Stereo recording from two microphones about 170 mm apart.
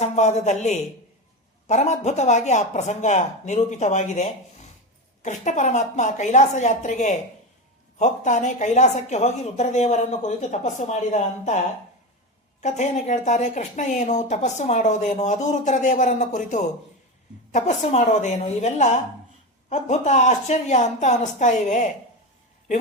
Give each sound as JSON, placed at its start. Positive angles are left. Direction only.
{"t": 0.0, "sound": "a man's voice", "side_deg": 40}
{"t": 12.6, "sound": "speech", "side_deg": 45}